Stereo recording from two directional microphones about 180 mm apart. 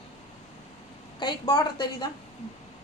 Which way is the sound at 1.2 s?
25° left (ahead or behind).